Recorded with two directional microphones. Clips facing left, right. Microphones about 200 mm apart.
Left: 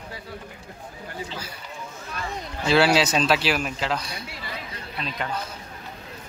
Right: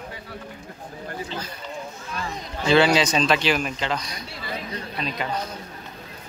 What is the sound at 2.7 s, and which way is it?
A man's voice, 5° left (ahead or behind).